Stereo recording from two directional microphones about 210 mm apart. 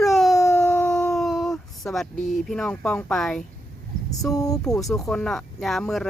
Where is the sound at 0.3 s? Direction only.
15° left (ahead or behind).